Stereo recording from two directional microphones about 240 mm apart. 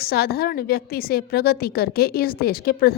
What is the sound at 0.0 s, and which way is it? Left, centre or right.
A woman's voice, left.